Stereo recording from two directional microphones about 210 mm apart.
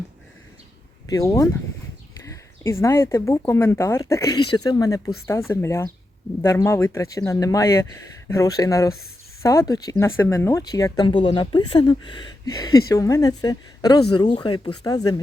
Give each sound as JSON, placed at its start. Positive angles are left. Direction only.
{"t": 1.1, "sound": "speech", "side_deg": 15}